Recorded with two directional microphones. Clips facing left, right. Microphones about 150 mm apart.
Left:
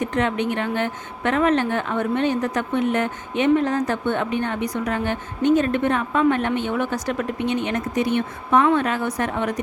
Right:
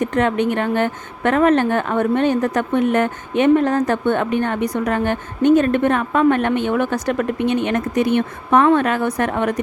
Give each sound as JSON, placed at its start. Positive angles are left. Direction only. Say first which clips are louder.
{"t": 0.0, "sound": "speech", "louder": "right 4 dB", "side_deg": -50}